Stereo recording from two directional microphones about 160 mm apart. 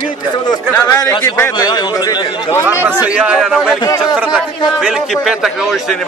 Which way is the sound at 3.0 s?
5° right (ahead or behind).